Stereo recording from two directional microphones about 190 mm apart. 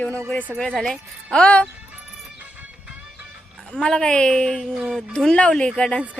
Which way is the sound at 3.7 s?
5° left (ahead or behind).